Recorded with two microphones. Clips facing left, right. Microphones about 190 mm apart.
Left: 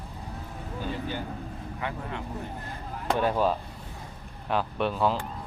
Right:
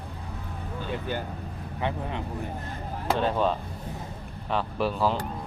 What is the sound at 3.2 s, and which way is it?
Speech, 10° left (ahead or behind).